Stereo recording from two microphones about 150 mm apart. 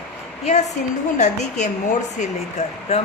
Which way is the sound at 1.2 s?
50° left (ahead or behind).